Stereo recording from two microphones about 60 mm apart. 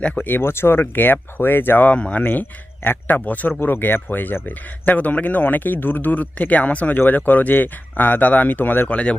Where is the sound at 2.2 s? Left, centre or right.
Left.